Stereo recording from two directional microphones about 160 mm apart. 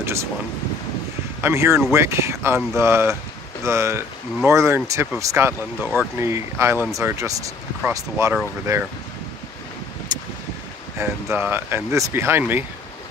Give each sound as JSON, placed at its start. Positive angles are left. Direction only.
{"t": 0.0, "sound": "a sound", "side_deg": -15}
{"t": 1.4, "sound": "speech", "side_deg": -15}
{"t": 10.1, "sound": "vehicle", "side_deg": -25}
{"t": 11.0, "sound": "speech", "side_deg": -15}